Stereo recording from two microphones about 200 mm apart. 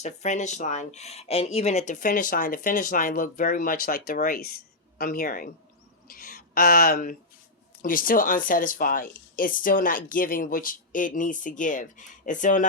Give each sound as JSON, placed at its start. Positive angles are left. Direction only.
{"t": 0.0, "sound": "speech", "side_deg": 35}